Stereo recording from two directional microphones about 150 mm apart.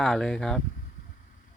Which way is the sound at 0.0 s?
5° left (ahead or behind).